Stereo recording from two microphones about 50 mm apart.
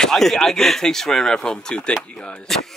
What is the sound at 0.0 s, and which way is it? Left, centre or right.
Speech, centre.